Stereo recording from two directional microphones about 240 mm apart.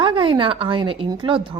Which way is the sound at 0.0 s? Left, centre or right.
Right.